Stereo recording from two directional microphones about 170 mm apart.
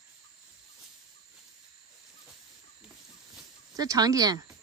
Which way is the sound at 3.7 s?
20° right (ahead or behind).